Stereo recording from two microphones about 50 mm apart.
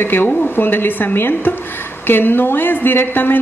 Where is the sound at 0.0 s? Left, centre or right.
Left.